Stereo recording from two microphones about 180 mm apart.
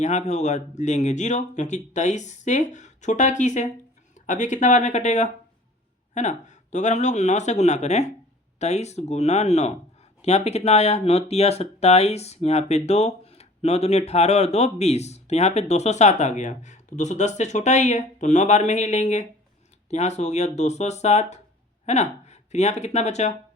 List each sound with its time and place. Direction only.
0.0 s speech: 40° left (ahead or behind)